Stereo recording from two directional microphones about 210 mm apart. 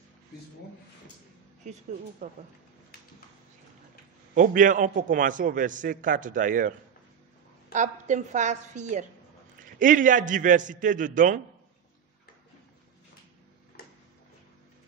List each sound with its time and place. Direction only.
1.6 s a man's voice: 35° right (ahead or behind)
4.4 s a man's voice: 40° right (ahead or behind)
7.7 s a man's voice: 35° right (ahead or behind)
13.8 s a sound: 45° left (ahead or behind)